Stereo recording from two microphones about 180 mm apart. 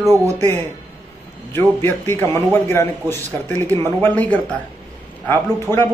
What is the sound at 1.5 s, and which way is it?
A man's voice, 10° left (ahead or behind).